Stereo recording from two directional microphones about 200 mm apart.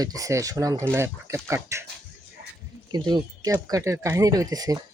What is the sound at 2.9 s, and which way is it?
Speech, 20° right (ahead or behind).